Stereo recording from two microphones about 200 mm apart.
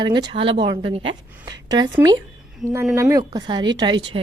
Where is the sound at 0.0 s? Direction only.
25° right (ahead or behind).